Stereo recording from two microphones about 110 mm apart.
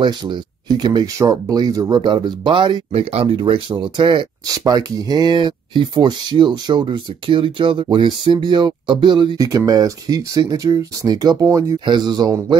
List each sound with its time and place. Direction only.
0.0 s speech: 45° right (ahead or behind)
9.4 s speech: 30° right (ahead or behind)
11.4 s speech: 25° right (ahead or behind)
11.8 s speech: 40° right (ahead or behind)